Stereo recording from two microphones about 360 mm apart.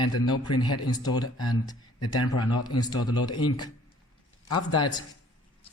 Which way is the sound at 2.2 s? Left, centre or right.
Left.